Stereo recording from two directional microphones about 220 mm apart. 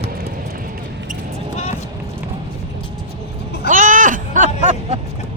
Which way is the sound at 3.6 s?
35° right (ahead or behind).